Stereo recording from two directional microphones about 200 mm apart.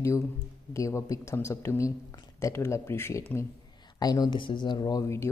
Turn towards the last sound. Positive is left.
turn(degrees=15)  # may be behind; listen again after turning